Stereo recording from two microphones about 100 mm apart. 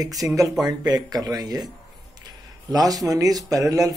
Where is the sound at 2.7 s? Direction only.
40° right (ahead or behind).